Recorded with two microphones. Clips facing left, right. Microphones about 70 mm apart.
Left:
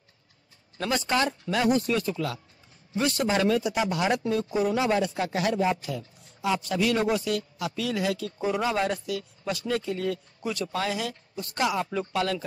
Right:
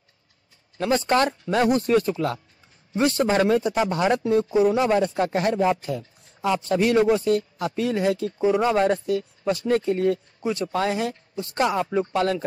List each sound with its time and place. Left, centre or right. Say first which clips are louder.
0.7 s speech: right 6 dB; right
1.1 s speech: right 4 dB; right
8.6 s speech: right 6 dB; right